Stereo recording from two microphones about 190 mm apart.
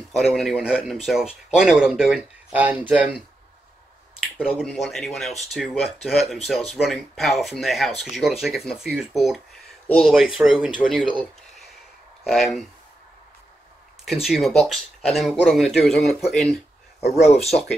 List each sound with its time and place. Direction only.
0.1 s speech: centre (ahead or behind)
4.4 s speech: centre (ahead or behind)
14.2 s speech: centre (ahead or behind)
17.0 s speech: 35° left (ahead or behind)